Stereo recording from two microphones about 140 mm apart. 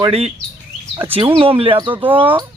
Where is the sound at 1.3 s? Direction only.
40° right (ahead or behind).